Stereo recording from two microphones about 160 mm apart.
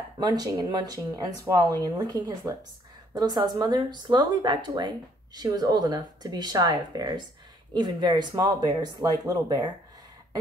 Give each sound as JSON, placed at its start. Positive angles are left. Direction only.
{"t": 0.2, "sound": "speech", "side_deg": -25}